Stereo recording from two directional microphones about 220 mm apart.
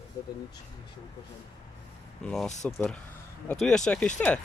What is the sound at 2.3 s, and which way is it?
Speech, centre (ahead or behind).